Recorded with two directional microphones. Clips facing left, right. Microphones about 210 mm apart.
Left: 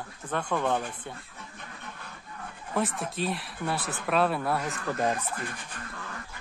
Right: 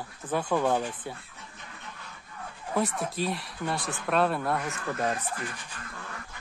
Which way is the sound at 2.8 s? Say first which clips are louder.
Right 1 dB; centre (ahead or behind).